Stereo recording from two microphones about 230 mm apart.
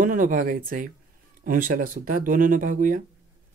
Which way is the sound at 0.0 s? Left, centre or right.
Right.